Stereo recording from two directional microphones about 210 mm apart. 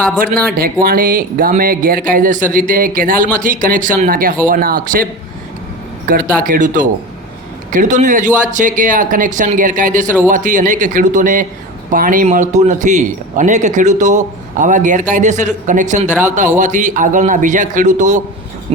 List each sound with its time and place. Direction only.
0.5 s a man's voice: 45° right (ahead or behind)
6.1 s a man's voice: 40° right (ahead or behind)